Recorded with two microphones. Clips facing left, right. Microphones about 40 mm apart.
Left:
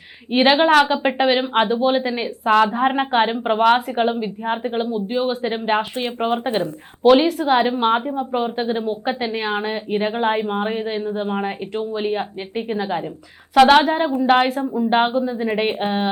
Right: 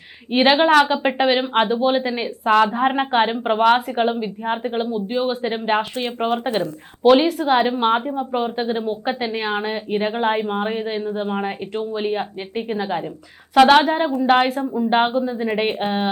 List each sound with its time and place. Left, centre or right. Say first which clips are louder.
0.3 s a woman's voice: even; centre
6.0 s speech: even; left
7.0 s a woman's voice: even; centre